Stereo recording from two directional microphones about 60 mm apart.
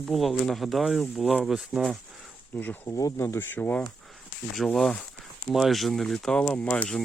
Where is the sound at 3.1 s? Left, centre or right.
Left.